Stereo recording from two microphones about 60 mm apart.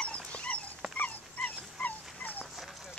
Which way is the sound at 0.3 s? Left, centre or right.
Left.